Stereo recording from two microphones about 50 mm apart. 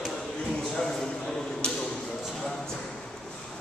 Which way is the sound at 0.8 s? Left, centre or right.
Centre.